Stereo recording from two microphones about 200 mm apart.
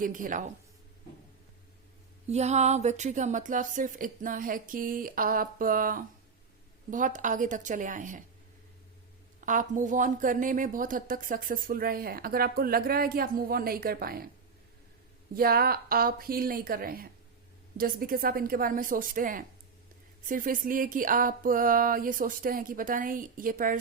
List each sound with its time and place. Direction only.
0.0 s a woman's voice: 40° right (ahead or behind)
2.3 s a woman's voice: 35° right (ahead or behind)
9.5 s a woman's voice: 40° right (ahead or behind)
15.4 s a woman's voice: 50° right (ahead or behind)